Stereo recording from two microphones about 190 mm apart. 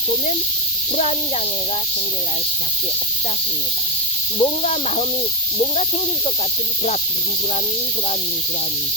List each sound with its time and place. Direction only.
4.4 s speech: 35° left (ahead or behind)